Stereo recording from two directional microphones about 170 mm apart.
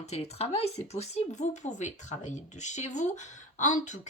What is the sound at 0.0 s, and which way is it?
Speech, 40° left (ahead or behind).